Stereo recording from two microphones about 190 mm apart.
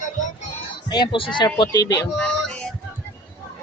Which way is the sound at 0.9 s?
25° left (ahead or behind).